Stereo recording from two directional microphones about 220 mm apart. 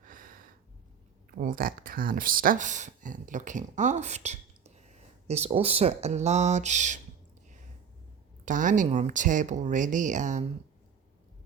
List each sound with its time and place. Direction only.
0.0 s a sound: 40° right (ahead or behind)
1.4 s speech: 40° right (ahead or behind)
8.4 s speech: 35° right (ahead or behind)